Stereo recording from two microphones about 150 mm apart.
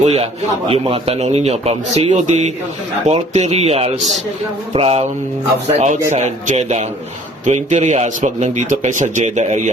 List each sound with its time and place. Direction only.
0.0 s a man's voice: 45° right (ahead or behind)
4.7 s a sound: 40° right (ahead or behind)
5.6 s a man's voice: 45° right (ahead or behind)